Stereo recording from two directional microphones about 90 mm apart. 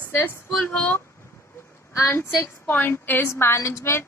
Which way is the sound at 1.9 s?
30° left (ahead or behind).